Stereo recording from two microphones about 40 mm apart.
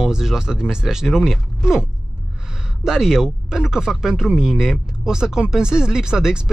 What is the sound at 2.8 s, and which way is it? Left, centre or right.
Speech, centre.